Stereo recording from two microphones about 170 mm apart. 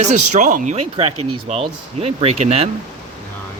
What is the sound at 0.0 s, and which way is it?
Speech, 45° right (ahead or behind).